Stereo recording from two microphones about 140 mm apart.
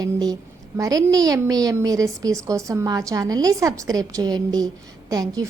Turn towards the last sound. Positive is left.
turn(degrees=-25)  # may be behind; listen again after turning